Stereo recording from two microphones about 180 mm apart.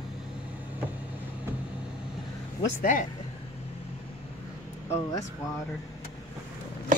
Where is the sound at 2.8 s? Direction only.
45° left (ahead or behind).